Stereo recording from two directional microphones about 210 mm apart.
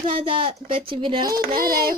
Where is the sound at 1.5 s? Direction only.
45° right (ahead or behind).